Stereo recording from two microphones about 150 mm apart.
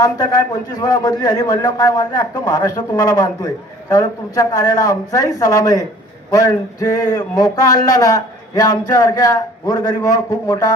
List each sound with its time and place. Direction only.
0.0 s speech: 25° left (ahead or behind)